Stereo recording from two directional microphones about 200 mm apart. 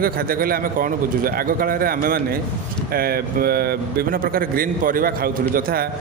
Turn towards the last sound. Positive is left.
turn(degrees=-50)  # may be behind; listen again after turning